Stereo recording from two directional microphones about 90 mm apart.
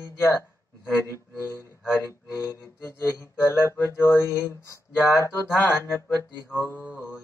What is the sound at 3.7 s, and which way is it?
Speech, 30° left (ahead or behind).